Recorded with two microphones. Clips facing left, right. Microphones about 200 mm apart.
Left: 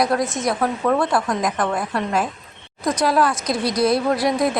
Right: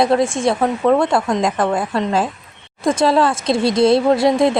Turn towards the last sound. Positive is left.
turn(degrees=-25)  # may be behind; listen again after turning